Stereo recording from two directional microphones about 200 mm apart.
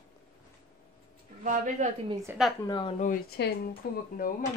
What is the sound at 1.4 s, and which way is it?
Speech, 40° right (ahead or behind).